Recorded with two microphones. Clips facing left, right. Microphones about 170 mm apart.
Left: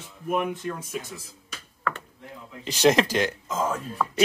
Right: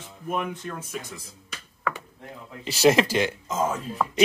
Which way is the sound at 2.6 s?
5° right (ahead or behind).